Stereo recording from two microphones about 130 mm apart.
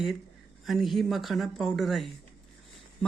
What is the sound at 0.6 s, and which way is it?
Speech, centre (ahead or behind).